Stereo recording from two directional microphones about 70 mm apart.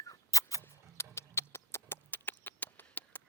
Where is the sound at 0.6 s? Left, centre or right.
Left.